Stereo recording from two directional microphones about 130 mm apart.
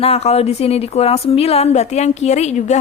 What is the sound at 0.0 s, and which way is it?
A woman's voice, 55° left (ahead or behind).